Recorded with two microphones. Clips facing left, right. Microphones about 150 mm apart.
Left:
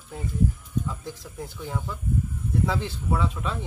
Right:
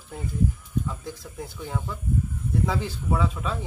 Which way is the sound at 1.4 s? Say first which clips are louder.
Even; centre (ahead or behind).